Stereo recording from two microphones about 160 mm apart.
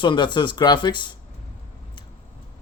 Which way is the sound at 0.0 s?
30° left (ahead or behind).